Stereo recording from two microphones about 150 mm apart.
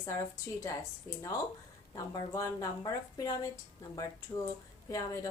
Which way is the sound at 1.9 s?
30° left (ahead or behind).